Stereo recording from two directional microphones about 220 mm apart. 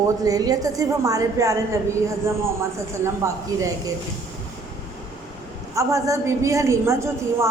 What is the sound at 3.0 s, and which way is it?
Speech, 15° right (ahead or behind).